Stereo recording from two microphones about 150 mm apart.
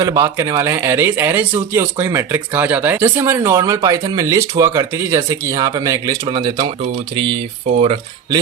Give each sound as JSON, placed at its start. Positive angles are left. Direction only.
{"t": 0.0, "sound": "a man's voice", "side_deg": -20}